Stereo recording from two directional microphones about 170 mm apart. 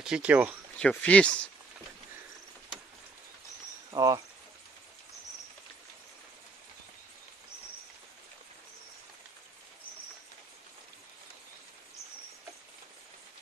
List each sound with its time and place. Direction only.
0.0 s speech: 5° right (ahead or behind)
0.7 s speech: 5° left (ahead or behind)
3.9 s speech: 20° right (ahead or behind)